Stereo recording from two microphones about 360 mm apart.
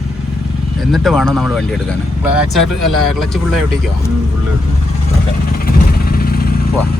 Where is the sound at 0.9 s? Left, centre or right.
Centre.